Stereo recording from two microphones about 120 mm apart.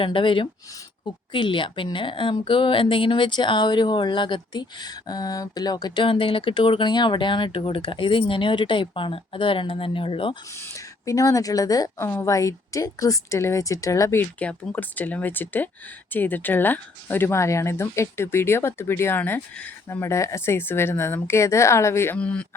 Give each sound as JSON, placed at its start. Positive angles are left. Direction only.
{"t": 0.0, "sound": "a woman's voice", "side_deg": 45}
{"t": 10.5, "sound": "speech", "side_deg": 20}
{"t": 22.2, "sound": "speech", "side_deg": 10}